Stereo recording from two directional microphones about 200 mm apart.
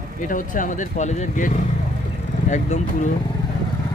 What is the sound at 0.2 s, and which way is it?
Speech, 40° left (ahead or behind).